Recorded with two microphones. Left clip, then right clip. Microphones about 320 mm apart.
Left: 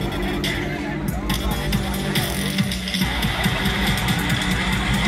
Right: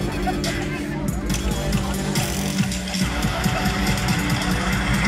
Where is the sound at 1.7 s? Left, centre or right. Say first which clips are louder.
Left 1 dB; centre.